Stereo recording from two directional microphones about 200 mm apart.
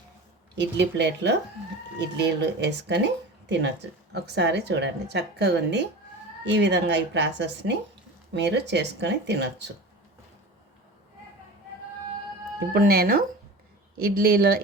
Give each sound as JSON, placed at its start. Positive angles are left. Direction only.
{"t": 0.5, "sound": "a woman's voice", "side_deg": -60}
{"t": 12.7, "sound": "speech", "side_deg": -50}